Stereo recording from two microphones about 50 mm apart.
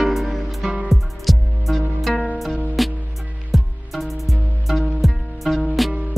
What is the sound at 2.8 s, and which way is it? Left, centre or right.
Music, centre.